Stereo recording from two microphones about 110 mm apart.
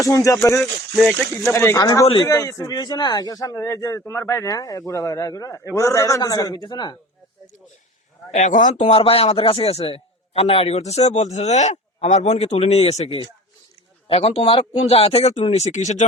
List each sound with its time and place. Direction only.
0.0 s speech: 30° left (ahead or behind)
0.6 s speech: centre (ahead or behind)
1.5 s speech: 30° left (ahead or behind)
2.7 s speech: 40° left (ahead or behind)
8.3 s speech: 90° left
9.0 s a man's voice: 60° left (ahead or behind); by 16.0 s 90° left